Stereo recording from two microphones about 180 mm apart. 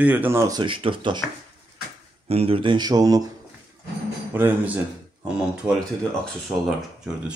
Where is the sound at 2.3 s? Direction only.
30° right (ahead or behind).